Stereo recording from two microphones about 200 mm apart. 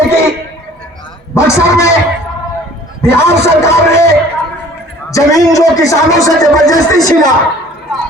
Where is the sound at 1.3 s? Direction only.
15° left (ahead or behind).